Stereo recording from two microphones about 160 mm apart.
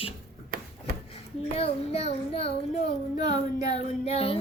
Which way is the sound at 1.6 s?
40° left (ahead or behind).